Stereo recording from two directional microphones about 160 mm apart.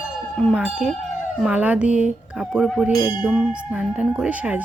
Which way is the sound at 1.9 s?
45° left (ahead or behind).